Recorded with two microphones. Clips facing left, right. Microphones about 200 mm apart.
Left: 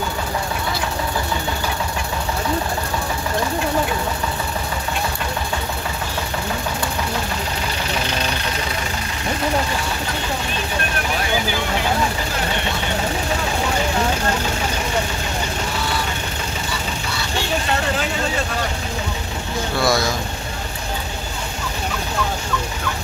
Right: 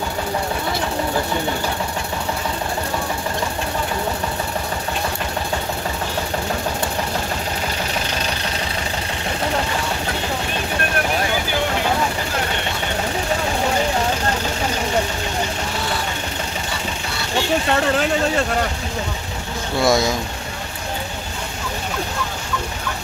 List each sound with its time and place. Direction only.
19.8 s vehicle: 20° right (ahead or behind)